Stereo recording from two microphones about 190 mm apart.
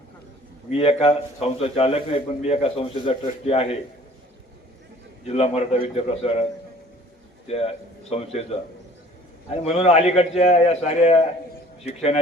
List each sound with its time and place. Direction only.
0.7 s a man's voice: 30° left (ahead or behind)
5.2 s a man's voice: 35° left (ahead or behind)
7.4 s a man's voice: 30° left (ahead or behind)